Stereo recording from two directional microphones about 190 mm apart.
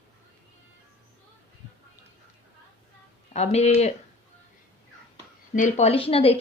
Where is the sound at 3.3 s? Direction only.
35° left (ahead or behind).